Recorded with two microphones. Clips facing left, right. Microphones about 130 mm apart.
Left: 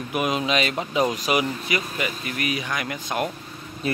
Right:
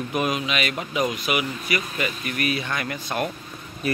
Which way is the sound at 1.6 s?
20° left (ahead or behind).